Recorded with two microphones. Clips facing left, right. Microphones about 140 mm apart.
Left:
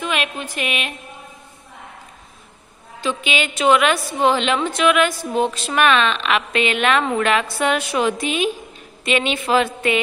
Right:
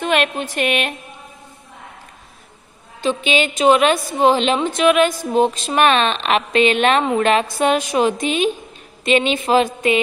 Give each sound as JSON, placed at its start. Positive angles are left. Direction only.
{"t": 0.0, "sound": "speech", "side_deg": -40}
{"t": 3.3, "sound": "a woman's voice", "side_deg": -30}
{"t": 3.9, "sound": "a woman's voice", "side_deg": -20}
{"t": 7.5, "sound": "a woman's voice", "side_deg": -20}